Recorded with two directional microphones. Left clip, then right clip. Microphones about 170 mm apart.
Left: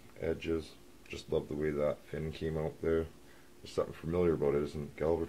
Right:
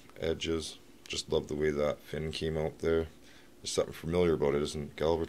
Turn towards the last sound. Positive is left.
turn(degrees=-15)  # may be behind; listen again after turning